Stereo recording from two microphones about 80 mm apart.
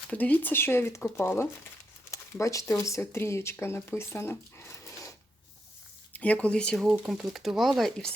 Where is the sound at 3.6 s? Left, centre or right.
Left.